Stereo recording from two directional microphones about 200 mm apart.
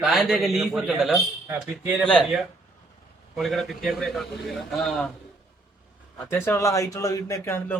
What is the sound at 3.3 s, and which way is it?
Speech, centre (ahead or behind).